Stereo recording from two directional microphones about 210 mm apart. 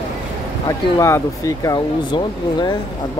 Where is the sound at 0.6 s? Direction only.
15° left (ahead or behind).